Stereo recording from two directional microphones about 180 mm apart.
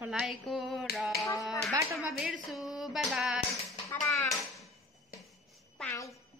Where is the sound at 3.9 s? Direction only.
Centre (ahead or behind).